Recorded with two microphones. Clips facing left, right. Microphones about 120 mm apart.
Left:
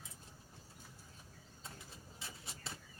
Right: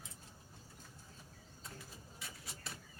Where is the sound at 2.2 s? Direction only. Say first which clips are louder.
Left 1 dB; 25° left (ahead or behind).